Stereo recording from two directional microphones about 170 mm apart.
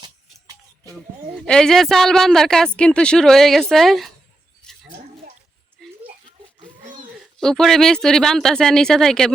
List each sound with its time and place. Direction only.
0.0 s music: 20° right (ahead or behind)
1.4 s speech: 5° left (ahead or behind)
4.6 s a sound: 5° left (ahead or behind)
7.2 s speech: 5° left (ahead or behind)